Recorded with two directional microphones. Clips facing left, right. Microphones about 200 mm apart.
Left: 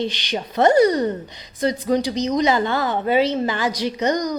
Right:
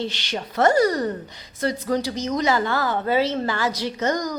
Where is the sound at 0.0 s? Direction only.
15° left (ahead or behind).